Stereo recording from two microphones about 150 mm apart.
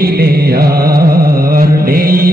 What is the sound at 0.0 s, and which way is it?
Music, 90° right.